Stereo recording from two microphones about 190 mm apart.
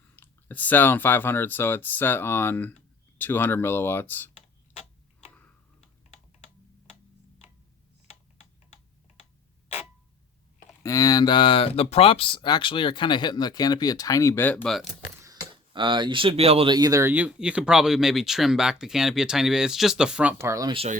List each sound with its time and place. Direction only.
0.2 s speech: 10° left (ahead or behind)
10.8 s speech: 20° left (ahead or behind); by 14.8 s centre (ahead or behind)
15.2 s speech: 20° right (ahead or behind)